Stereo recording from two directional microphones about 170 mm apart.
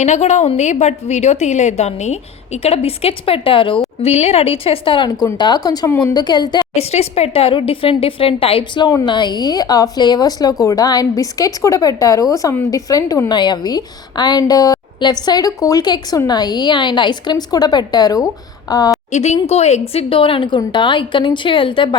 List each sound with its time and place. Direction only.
0.0 s a woman's voice: 40° left (ahead or behind); by 6.7 s 25° left (ahead or behind)
6.7 s a woman's voice: 40° left (ahead or behind); by 18.8 s 20° left (ahead or behind)
19.1 s a woman's voice: 40° left (ahead or behind)